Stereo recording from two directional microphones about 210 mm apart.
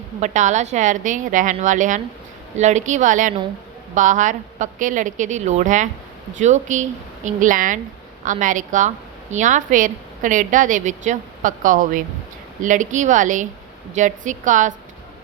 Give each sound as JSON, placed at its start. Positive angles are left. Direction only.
{"t": 0.2, "sound": "a woman's voice", "side_deg": -35}